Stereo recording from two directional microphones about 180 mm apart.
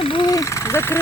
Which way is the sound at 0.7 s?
15° left (ahead or behind).